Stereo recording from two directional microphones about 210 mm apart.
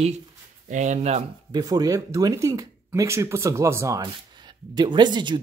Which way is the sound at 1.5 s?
20° right (ahead or behind).